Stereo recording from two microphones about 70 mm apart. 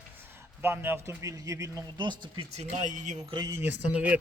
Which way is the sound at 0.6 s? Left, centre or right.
Right.